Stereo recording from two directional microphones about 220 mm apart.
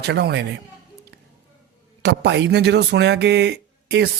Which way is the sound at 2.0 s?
50° right (ahead or behind).